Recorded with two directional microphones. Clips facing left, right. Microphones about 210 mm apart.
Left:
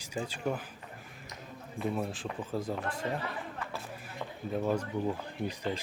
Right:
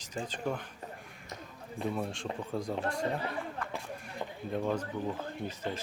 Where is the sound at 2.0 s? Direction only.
5° left (ahead or behind).